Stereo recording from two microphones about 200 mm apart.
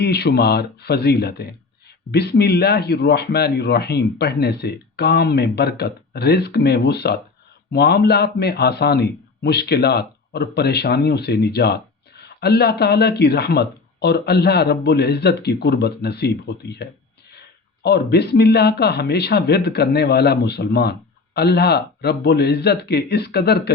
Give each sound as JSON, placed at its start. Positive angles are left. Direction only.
{"t": 0.0, "sound": "a man's voice", "side_deg": 55}